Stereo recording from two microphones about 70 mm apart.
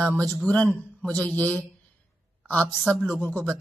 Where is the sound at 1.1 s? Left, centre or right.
Left.